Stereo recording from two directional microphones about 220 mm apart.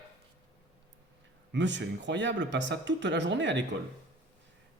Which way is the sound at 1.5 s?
55° right (ahead or behind).